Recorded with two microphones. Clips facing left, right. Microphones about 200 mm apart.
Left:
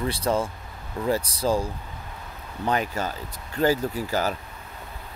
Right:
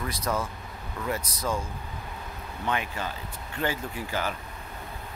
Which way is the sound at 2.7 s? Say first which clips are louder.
Left 5 dB; 40° left (ahead or behind).